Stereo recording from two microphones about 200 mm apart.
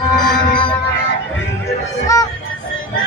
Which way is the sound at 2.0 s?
15° left (ahead or behind).